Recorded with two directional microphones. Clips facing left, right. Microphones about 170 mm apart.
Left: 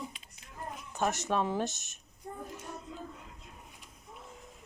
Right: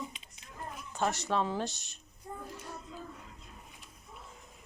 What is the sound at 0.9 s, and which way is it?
Speech, 20° left (ahead or behind).